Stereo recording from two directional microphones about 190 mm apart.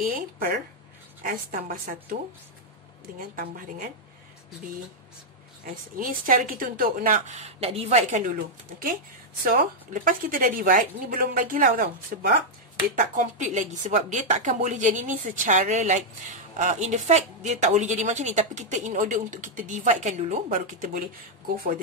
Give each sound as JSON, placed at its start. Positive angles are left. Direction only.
{"t": 0.0, "sound": "a woman's voice", "side_deg": -50}
{"t": 3.2, "sound": "a woman's voice", "side_deg": -45}
{"t": 5.7, "sound": "a woman's voice", "side_deg": -45}
{"t": 9.4, "sound": "a woman's voice", "side_deg": -50}